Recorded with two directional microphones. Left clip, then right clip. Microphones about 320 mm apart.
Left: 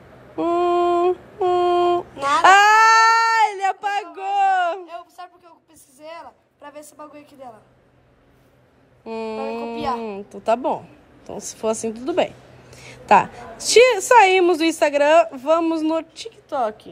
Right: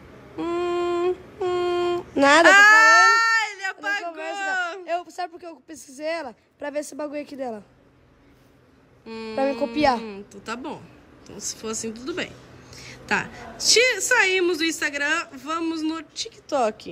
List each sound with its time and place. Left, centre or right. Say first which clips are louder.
0.4 s a sound: left 7 dB; centre
2.4 s cat: left 3 dB; centre
4.8 s a man's voice: right 8 dB; right
9.0 s a woman's voice: right 2 dB; centre